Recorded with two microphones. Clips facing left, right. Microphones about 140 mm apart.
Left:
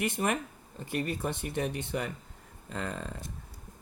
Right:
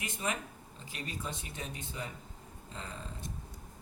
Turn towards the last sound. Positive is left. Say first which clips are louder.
# left 8 dB
turn(degrees=65)  # may be behind; listen again after turning